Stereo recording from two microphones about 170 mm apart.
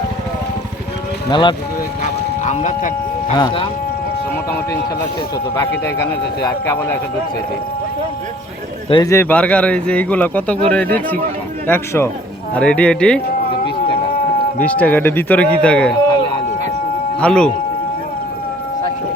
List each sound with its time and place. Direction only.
1.3 s speech: 25° left (ahead or behind)
2.0 s a sound: 45° left (ahead or behind)
3.3 s speech: 30° left (ahead or behind)
6.0 s speech: 15° left (ahead or behind)
8.9 s speech: 20° left (ahead or behind)
11.6 s speech: 15° left (ahead or behind)
14.6 s speech: 10° left (ahead or behind)
16.1 s a sound: 30° left (ahead or behind)
17.2 s speech: 5° left (ahead or behind)